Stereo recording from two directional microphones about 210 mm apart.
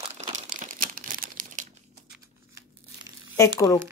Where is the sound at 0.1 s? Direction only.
35° right (ahead or behind).